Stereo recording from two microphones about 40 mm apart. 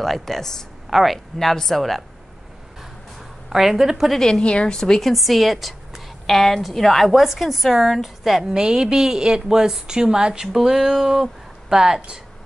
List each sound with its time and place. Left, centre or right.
0.0 s a woman's voice: centre
2.8 s a sound: centre
4.1 s speech: centre
4.4 s speech: left
4.7 s speech: centre
5.0 s a woman's voice: centre
8.5 s a woman's voice: centre
10.5 s a woman's voice: centre